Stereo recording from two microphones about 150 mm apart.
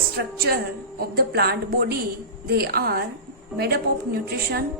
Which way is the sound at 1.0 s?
90° right.